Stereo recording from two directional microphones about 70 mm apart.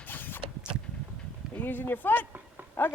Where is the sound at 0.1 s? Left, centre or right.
Left.